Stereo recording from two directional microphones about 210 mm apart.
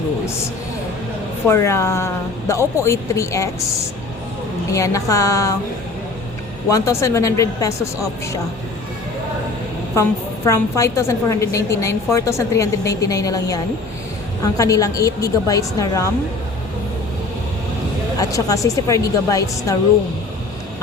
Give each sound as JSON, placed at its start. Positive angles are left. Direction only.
{"t": 1.5, "sound": "a woman's voice", "side_deg": 10}
{"t": 4.7, "sound": "a woman's voice", "side_deg": 15}
{"t": 6.7, "sound": "a woman's voice", "side_deg": 15}
{"t": 9.9, "sound": "a woman's voice", "side_deg": 15}
{"t": 14.6, "sound": "a woman's voice", "side_deg": 15}
{"t": 18.2, "sound": "a woman's voice", "side_deg": 15}